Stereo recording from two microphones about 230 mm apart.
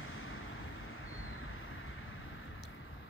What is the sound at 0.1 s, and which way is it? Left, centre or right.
Vehicle, left.